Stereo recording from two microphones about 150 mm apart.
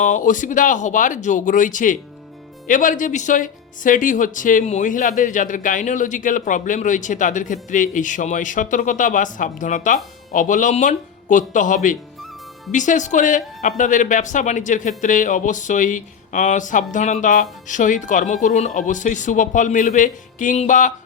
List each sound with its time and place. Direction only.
0.0 s speech: 60° left (ahead or behind)